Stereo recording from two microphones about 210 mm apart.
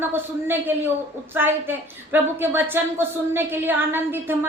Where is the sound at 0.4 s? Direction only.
10° right (ahead or behind).